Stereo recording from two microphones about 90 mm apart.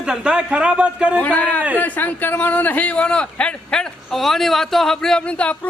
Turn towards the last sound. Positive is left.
turn(degrees=10)  # may be behind; listen again after turning